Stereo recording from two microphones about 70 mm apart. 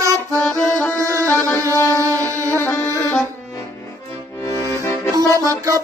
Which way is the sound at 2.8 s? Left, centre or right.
Right.